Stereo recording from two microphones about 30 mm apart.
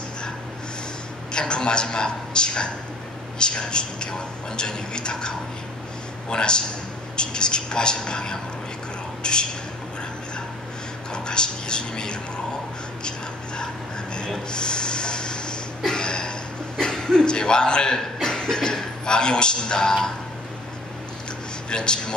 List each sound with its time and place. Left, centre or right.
1.3 s speech: left
6.3 s speech: left
11.2 s speech: left
14.5 s snort: left
15.8 s a sound: left
17.9 s a man's voice: left
21.6 s speech: left